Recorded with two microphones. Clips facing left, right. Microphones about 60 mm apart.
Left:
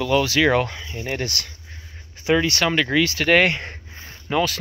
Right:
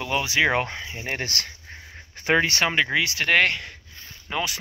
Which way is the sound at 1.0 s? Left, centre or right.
Right.